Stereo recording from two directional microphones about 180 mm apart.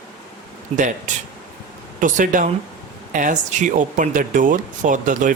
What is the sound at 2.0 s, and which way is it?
Speech, 45° right (ahead or behind).